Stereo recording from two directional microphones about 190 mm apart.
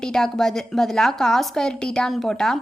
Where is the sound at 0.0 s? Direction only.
5° left (ahead or behind).